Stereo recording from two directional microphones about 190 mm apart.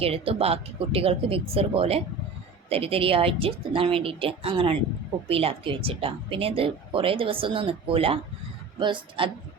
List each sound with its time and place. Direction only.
0.0 s speech: 30° right (ahead or behind)